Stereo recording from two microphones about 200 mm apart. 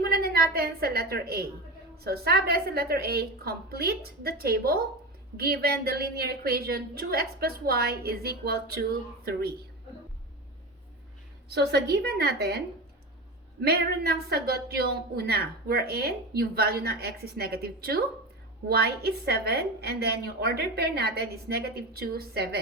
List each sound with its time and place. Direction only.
0.0 s a woman's voice: 50° right (ahead or behind)
11.4 s a woman's voice: 55° right (ahead or behind)